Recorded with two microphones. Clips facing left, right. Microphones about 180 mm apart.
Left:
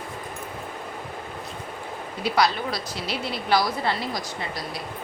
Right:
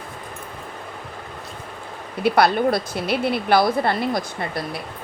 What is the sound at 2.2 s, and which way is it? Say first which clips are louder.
A woman's voice: right 6 dB; 55° right (ahead or behind).